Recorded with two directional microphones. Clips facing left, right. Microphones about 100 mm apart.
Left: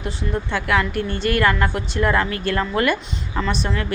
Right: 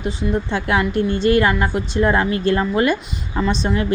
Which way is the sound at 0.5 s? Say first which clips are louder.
Even; 25° right (ahead or behind).